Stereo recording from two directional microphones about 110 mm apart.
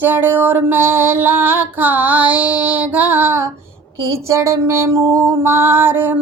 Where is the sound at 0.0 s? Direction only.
15° right (ahead or behind).